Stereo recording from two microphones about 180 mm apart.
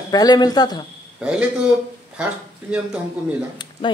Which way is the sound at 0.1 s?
20° left (ahead or behind).